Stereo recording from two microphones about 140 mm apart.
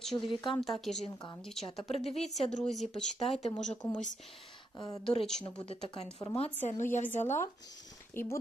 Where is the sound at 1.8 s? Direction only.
50° left (ahead or behind).